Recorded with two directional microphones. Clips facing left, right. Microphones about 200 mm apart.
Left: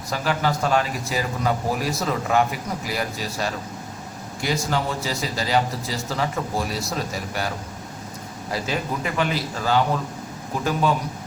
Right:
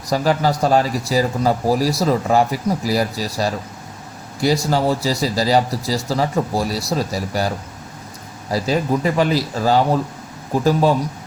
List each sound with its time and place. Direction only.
0.1 s speech: 40° right (ahead or behind)
8.5 s speech: 35° right (ahead or behind)